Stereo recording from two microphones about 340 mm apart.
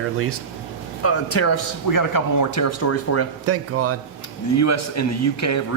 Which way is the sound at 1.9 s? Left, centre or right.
Left.